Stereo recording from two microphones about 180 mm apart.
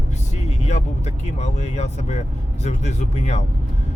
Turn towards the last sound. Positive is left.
turn(degrees=40)  # may be behind; listen again after turning